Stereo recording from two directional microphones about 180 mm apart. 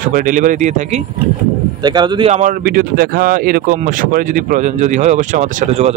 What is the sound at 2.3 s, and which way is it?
Speech, 45° right (ahead or behind).